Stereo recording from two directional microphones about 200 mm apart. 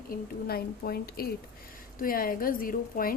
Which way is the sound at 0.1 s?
50° left (ahead or behind).